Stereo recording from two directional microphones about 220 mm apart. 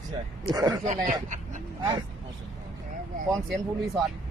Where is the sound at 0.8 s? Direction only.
35° right (ahead or behind).